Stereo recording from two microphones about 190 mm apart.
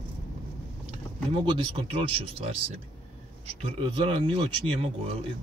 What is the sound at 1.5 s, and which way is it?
A man's voice, 30° right (ahead or behind).